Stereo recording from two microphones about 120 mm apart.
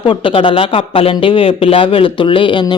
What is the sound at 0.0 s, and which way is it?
Speech, 45° left (ahead or behind).